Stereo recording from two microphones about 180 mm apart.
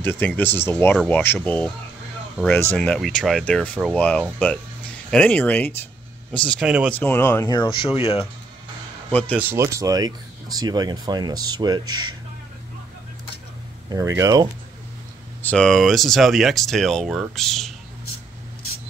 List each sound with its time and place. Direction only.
0.0 s speech: 10° left (ahead or behind)
6.6 s speech: 5° right (ahead or behind)
6.9 s speech: 10° left (ahead or behind); by 8.3 s 30° left (ahead or behind)
9.4 s speech: 15° right (ahead or behind)
13.8 s speech: 20° right (ahead or behind)
15.4 s speech: 5° left (ahead or behind)